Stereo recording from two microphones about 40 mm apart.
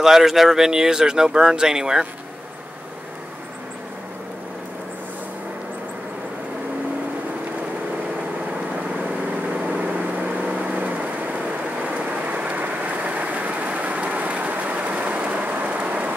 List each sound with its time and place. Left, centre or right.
0.0 s speech: centre
9.5 s vehicle: right